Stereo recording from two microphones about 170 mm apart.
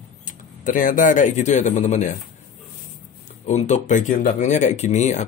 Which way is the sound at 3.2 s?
45° left (ahead or behind).